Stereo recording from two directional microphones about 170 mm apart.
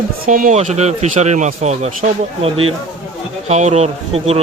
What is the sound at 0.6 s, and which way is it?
Speech, 40° right (ahead or behind).